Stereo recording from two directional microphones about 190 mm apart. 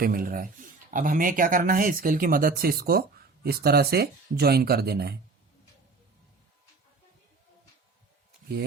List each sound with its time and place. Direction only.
0.0 s speech: 50° right (ahead or behind)